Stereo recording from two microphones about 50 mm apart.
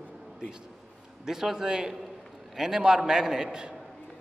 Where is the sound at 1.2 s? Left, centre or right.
Centre.